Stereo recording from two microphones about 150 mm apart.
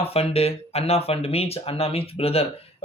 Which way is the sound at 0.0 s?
40° left (ahead or behind).